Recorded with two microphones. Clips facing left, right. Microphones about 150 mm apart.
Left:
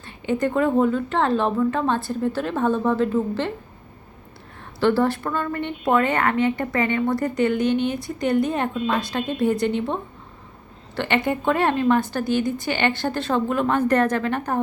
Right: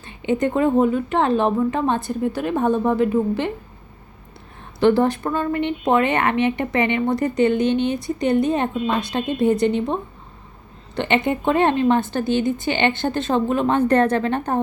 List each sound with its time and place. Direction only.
0.0 s a woman's voice: 20° right (ahead or behind)
4.8 s a woman's voice: 20° right (ahead or behind)